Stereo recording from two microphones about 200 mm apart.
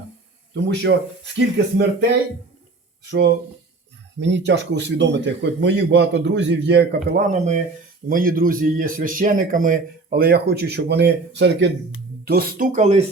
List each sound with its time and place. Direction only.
0.5 s a man's voice: 60° right (ahead or behind)
3.1 s a man's voice: 55° right (ahead or behind)
7.3 s speech: 35° right (ahead or behind)
8.1 s speech: 45° right (ahead or behind); by 11.7 s 60° right (ahead or behind)
12.2 s speech: 50° right (ahead or behind)